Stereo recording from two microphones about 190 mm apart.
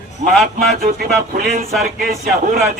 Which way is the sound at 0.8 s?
50° right (ahead or behind).